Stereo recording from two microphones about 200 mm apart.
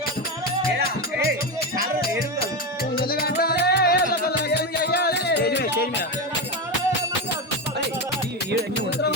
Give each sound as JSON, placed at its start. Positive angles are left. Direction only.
{"t": 2.9, "sound": "music", "side_deg": 50}